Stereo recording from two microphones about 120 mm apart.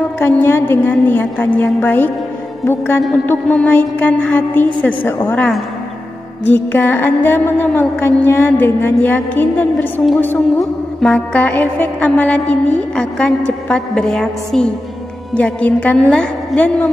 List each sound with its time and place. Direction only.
0.2 s music: 15° left (ahead or behind)
6.5 s music: 15° left (ahead or behind)